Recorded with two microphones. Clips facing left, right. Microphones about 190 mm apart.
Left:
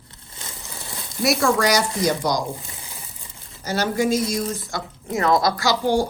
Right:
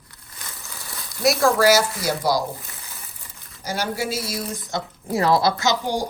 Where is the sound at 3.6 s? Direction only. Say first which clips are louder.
Left 4 dB; 10° right (ahead or behind).